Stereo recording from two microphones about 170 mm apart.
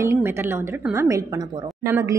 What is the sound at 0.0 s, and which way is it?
A woman's voice, 15° right (ahead or behind).